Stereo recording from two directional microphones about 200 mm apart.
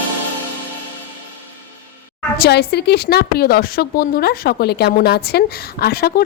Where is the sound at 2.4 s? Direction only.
55° left (ahead or behind).